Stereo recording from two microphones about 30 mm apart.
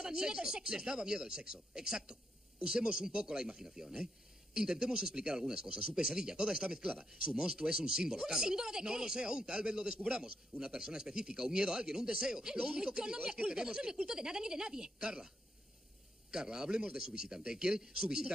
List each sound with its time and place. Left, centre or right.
0.0 s speech: right